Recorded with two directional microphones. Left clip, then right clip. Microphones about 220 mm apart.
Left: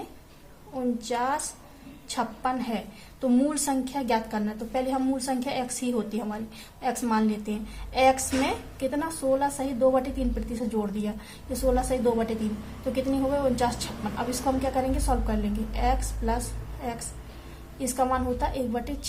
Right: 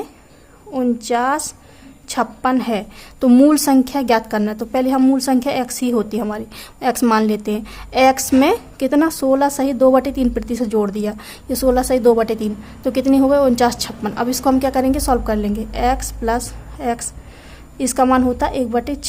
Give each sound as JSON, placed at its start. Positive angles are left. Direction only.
{"t": 0.7, "sound": "a woman's voice", "side_deg": -40}
{"t": 17.7, "sound": "a woman's voice", "side_deg": -40}